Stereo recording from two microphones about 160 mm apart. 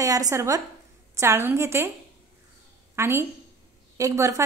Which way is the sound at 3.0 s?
15° right (ahead or behind).